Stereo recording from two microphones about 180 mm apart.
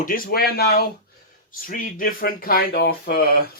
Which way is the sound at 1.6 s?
50° left (ahead or behind).